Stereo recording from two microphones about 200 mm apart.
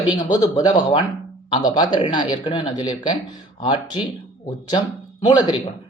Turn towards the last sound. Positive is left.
turn(degrees=20)  # may be behind; listen again after turning